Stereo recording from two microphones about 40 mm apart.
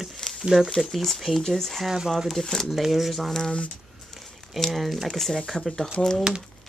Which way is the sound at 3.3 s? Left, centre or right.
Centre.